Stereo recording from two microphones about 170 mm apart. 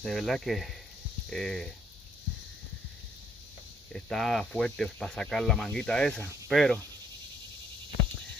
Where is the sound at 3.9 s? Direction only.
Centre (ahead or behind).